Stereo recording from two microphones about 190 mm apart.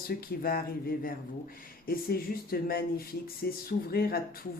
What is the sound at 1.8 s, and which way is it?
Speech, 50° left (ahead or behind).